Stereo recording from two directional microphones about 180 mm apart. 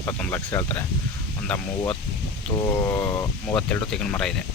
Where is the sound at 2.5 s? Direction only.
20° left (ahead or behind).